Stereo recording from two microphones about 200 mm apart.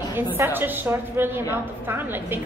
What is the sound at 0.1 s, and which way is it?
A woman's voice, 10° right (ahead or behind).